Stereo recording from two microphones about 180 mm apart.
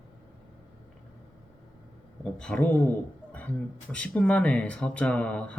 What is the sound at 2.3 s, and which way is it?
Speech, 5° left (ahead or behind).